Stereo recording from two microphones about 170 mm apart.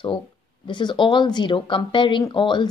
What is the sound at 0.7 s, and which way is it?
Speech, 25° left (ahead or behind).